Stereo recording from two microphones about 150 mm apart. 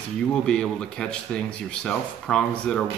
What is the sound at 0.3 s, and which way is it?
Speech, 5° left (ahead or behind).